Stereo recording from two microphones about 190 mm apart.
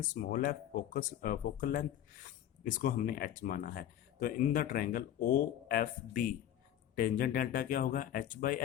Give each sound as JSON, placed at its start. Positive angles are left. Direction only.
{"t": 0.1, "sound": "speech", "side_deg": 45}